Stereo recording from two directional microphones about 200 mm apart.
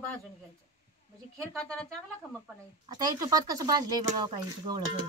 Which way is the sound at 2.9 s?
20° right (ahead or behind).